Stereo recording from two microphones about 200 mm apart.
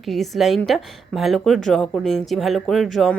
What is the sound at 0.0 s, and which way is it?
A woman's voice, centre (ahead or behind).